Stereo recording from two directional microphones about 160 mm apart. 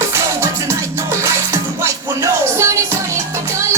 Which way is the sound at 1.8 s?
20° right (ahead or behind).